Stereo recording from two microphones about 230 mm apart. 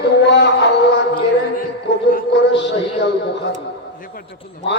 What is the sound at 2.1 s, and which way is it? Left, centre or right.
A man's voice, left.